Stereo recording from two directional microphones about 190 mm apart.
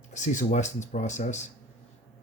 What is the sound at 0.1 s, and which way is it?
Speech, 40° left (ahead or behind).